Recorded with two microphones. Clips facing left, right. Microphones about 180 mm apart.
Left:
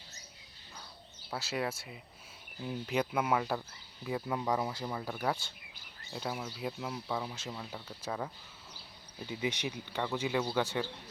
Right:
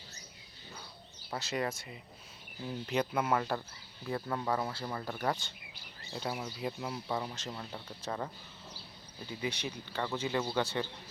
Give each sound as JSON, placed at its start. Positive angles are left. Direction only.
{"t": 1.3, "sound": "speech", "side_deg": 5}
{"t": 9.4, "sound": "speech", "side_deg": 20}